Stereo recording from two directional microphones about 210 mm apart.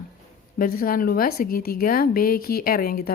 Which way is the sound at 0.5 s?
40° left (ahead or behind).